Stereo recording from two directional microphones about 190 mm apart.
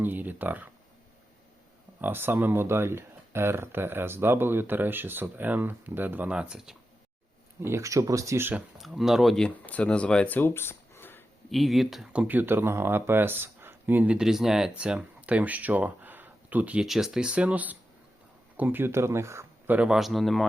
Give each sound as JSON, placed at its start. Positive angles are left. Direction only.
{"t": 0.0, "sound": "speech", "side_deg": -10}
{"t": 2.0, "sound": "speech", "side_deg": -10}
{"t": 7.6, "sound": "speech", "side_deg": -15}
{"t": 11.5, "sound": "speech", "side_deg": 0}